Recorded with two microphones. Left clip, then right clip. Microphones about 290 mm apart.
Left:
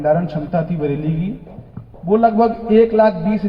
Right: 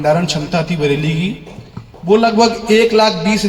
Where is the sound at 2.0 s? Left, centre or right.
Right.